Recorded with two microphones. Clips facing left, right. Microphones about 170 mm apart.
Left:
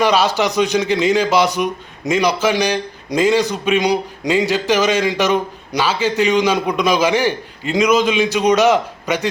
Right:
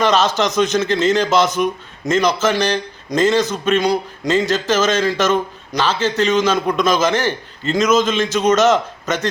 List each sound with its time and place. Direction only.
0.0 s a man's voice: 10° left (ahead or behind)